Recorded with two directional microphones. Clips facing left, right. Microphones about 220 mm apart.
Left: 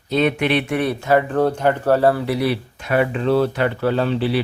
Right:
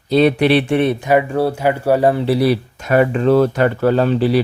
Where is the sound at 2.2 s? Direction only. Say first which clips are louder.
Right 5 dB; 35° right (ahead or behind).